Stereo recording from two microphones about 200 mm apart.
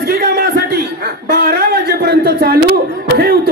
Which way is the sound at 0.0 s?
50° right (ahead or behind).